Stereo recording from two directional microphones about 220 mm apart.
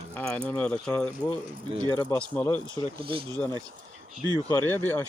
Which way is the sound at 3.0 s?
25° right (ahead or behind).